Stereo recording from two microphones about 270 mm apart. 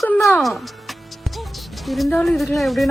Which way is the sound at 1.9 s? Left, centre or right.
Centre.